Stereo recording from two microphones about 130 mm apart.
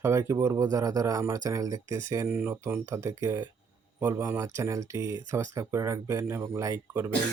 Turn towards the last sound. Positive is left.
turn(degrees=-20)  # may be behind; listen again after turning